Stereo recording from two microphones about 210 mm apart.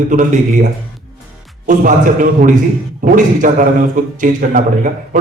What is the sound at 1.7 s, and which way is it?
A man's voice, 40° right (ahead or behind).